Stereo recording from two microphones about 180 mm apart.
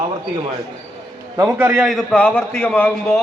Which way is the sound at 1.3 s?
15° right (ahead or behind).